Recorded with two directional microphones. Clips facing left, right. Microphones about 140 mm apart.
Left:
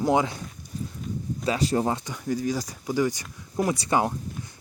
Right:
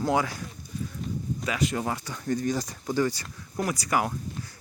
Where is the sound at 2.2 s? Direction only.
5° left (ahead or behind); by 4.1 s 25° left (ahead or behind).